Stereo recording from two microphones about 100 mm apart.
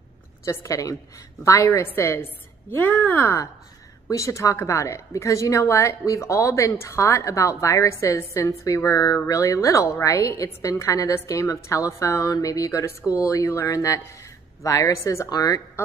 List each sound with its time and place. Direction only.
0.5 s a woman's voice: 35° left (ahead or behind); by 3.3 s 20° left (ahead or behind)
4.1 s a woman's voice: 30° left (ahead or behind)